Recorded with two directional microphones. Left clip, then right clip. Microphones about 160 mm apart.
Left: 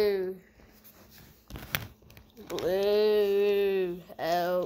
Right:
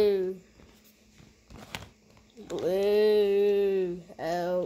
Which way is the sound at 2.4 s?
45° right (ahead or behind).